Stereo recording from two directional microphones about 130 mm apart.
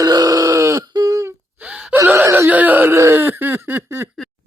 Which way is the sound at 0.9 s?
25° right (ahead or behind).